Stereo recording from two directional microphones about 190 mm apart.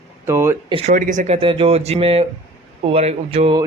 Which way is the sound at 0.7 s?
30° right (ahead or behind).